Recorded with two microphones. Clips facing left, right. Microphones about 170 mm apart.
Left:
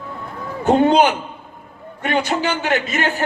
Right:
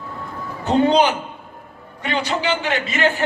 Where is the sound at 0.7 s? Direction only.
50° left (ahead or behind).